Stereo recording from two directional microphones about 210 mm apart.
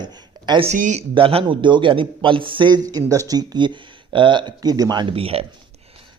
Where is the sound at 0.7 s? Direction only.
35° right (ahead or behind).